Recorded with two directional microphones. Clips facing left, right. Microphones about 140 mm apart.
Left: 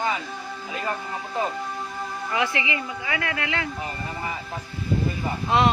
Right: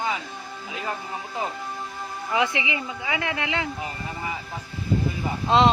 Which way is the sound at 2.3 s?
20° right (ahead or behind).